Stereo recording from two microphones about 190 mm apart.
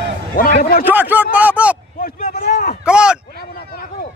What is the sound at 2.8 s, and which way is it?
Speech, 5° right (ahead or behind).